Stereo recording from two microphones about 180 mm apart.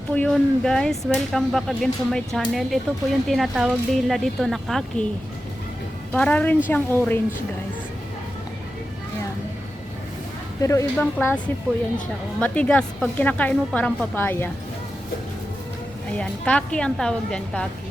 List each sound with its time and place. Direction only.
0.1 s speech: 5° left (ahead or behind)
6.1 s speech: 5° left (ahead or behind)
10.6 s speech: 15° left (ahead or behind)
16.0 s speech: 5° left (ahead or behind)